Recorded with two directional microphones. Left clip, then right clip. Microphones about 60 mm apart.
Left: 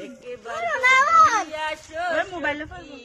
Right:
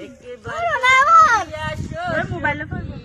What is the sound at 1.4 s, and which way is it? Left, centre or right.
Speech, right.